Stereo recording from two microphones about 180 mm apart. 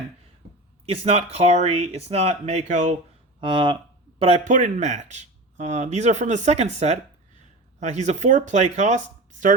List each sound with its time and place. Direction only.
0.9 s speech: 35° right (ahead or behind)
3.4 s speech: 25° right (ahead or behind)
4.2 s speech: 40° right (ahead or behind)